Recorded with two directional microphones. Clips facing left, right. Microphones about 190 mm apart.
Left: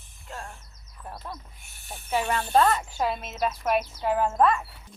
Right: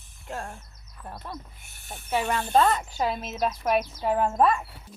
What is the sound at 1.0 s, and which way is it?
A woman's voice, centre (ahead or behind).